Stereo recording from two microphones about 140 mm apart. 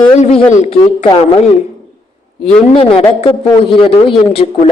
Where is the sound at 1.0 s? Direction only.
40° left (ahead or behind).